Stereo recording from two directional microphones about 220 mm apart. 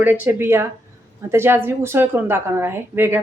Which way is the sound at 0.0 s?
10° right (ahead or behind).